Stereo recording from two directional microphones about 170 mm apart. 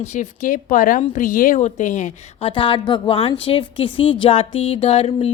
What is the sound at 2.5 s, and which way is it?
A woman's voice, 30° left (ahead or behind).